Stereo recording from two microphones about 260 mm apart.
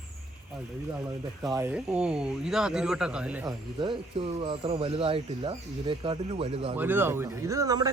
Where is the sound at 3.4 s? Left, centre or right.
Centre.